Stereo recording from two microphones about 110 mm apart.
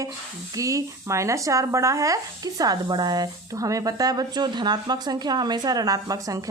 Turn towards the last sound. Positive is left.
turn(degrees=-30)  # may be behind; listen again after turning